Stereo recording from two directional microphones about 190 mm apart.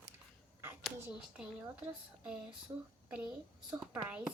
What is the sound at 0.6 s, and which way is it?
Speech, 10° right (ahead or behind).